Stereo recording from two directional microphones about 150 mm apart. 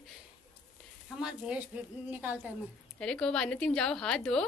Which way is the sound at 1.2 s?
5° right (ahead or behind).